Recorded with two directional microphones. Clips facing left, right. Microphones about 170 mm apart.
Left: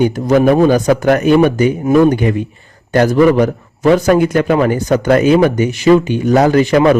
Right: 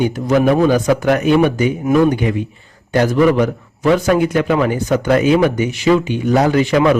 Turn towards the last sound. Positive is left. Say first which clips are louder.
# left 3 dB
turn(degrees=45)  # may be behind; listen again after turning